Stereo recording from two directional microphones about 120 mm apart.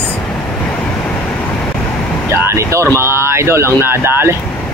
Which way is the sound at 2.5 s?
25° right (ahead or behind).